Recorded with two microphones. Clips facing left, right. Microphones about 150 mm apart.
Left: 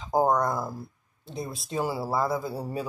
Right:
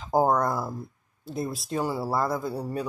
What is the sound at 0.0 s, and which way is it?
Speech, 5° right (ahead or behind).